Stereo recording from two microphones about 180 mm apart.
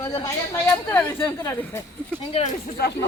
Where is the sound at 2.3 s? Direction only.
35° left (ahead or behind).